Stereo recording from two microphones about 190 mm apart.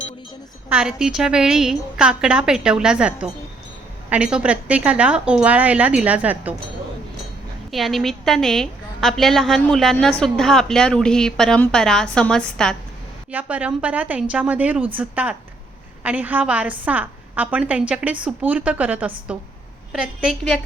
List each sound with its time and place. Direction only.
0.7 s a woman's voice: 5° right (ahead or behind)
7.7 s a woman's voice: centre (ahead or behind)
13.3 s a woman's voice: 5° right (ahead or behind)